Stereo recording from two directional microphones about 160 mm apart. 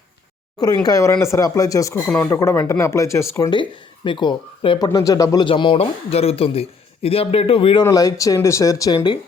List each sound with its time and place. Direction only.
0.6 s speech: 25° left (ahead or behind)
2.0 s speech: 5° left (ahead or behind)
2.3 s speech: 15° left (ahead or behind)
3.5 s speech: 30° left (ahead or behind)